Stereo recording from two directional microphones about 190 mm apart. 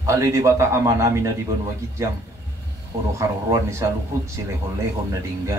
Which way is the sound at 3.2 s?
15° right (ahead or behind).